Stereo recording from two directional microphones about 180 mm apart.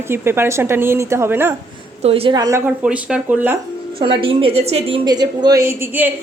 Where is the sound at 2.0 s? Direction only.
35° right (ahead or behind); by 3.6 s 10° right (ahead or behind).